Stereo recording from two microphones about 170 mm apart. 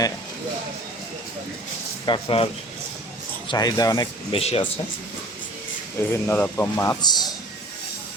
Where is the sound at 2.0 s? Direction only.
30° left (ahead or behind).